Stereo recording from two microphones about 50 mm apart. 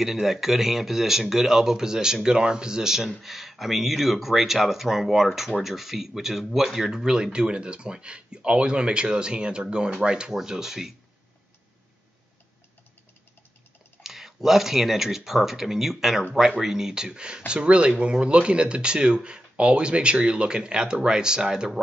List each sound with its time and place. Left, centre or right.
0.0 s speech: centre
14.0 s speech: centre